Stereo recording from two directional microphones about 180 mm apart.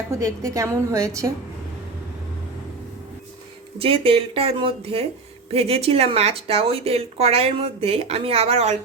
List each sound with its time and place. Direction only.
0.1 s a woman's voice: 15° right (ahead or behind)
3.8 s speech: 30° right (ahead or behind)